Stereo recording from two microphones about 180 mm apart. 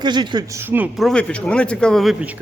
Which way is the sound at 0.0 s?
25° right (ahead or behind).